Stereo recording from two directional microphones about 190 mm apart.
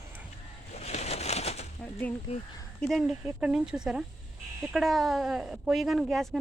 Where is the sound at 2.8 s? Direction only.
Centre (ahead or behind).